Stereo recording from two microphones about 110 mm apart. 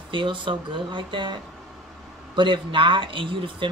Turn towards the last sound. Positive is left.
turn(degrees=-50)  # may be behind; listen again after turning